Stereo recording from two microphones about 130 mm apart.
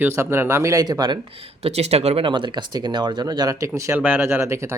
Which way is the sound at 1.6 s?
55° right (ahead or behind).